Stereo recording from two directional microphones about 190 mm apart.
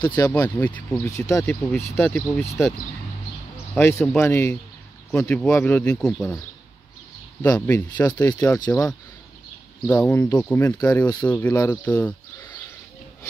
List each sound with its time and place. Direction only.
0.0 s speech: 20° left (ahead or behind)
0.3 s speech: 10° left (ahead or behind)
3.7 s speech: 10° left (ahead or behind)
7.4 s speech: 15° left (ahead or behind)
11.2 s speech: 10° left (ahead or behind)